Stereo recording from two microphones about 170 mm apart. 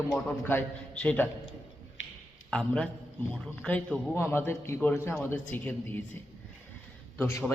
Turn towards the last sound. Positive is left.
turn(degrees=15)  # may be behind; listen again after turning